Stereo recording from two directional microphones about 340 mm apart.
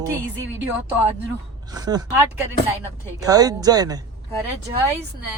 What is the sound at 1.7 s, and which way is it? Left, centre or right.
Speech, centre.